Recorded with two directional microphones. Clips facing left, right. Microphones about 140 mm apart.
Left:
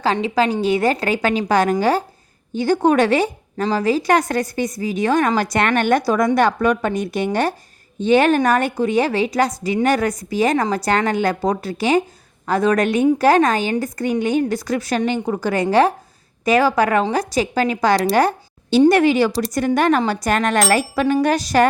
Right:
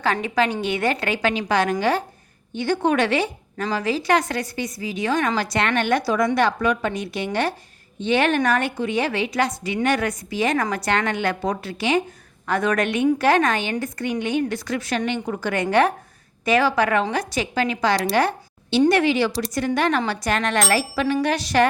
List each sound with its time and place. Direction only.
0.0 s a woman's voice: 30° left (ahead or behind)